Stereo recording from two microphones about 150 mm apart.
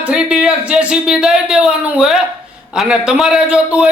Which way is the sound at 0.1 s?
5° right (ahead or behind).